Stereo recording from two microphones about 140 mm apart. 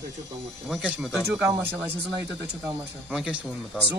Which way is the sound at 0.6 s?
Centre (ahead or behind).